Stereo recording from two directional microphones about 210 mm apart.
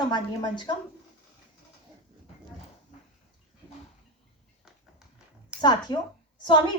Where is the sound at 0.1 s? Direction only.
20° left (ahead or behind).